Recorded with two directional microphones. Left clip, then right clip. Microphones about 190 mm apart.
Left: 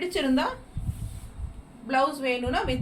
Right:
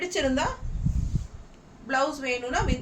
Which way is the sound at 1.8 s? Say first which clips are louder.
Left 2 dB; 15° right (ahead or behind).